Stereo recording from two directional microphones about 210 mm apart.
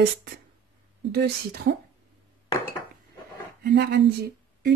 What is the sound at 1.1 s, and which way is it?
Speech, 50° right (ahead or behind).